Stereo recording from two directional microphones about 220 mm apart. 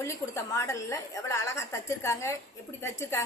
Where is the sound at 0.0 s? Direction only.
15° left (ahead or behind).